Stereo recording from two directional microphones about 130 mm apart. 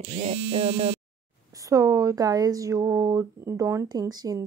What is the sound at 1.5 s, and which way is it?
A woman's voice, 25° right (ahead or behind).